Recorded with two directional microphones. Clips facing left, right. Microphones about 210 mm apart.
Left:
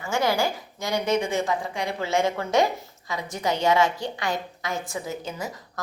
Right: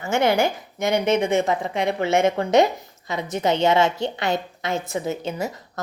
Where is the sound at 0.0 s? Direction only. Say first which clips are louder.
Right 4 dB; 20° right (ahead or behind).